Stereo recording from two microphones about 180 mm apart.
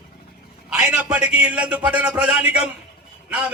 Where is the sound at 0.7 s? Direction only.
5° right (ahead or behind).